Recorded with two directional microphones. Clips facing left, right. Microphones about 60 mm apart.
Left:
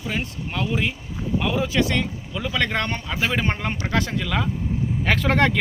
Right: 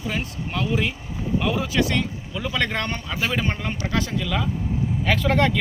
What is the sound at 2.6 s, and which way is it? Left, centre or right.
Speech, left.